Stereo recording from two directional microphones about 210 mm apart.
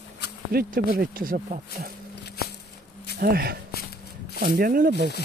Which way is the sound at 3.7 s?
50° left (ahead or behind).